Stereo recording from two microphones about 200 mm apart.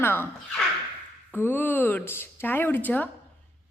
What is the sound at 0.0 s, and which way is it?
A woman's voice, 10° left (ahead or behind).